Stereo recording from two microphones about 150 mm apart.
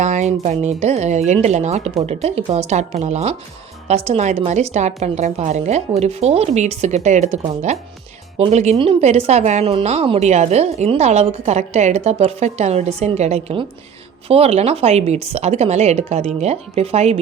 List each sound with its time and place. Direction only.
0.0 s speech: 50° right (ahead or behind)
8.4 s speech: 45° right (ahead or behind)